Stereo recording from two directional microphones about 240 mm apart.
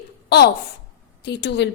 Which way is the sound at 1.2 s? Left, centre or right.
Left.